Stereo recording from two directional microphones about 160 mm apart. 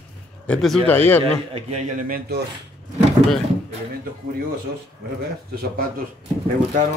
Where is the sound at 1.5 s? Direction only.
40° right (ahead or behind); by 2.4 s 60° right (ahead or behind).